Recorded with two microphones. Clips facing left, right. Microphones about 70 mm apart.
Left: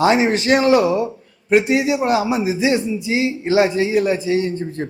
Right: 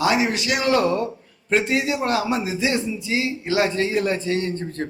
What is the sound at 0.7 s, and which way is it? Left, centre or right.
A man's voice, centre.